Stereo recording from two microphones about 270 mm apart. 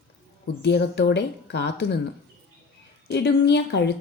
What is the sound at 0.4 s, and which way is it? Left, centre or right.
A woman's voice, left.